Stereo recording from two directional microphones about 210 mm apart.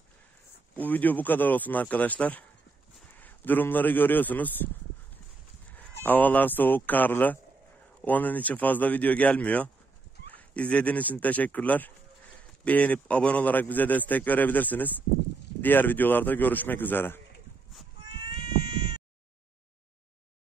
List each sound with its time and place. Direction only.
0.7 s a man's voice: 10° left (ahead or behind)
5.7 s a man's voice: 5° left (ahead or behind)
18.2 s cat: 20° right (ahead or behind)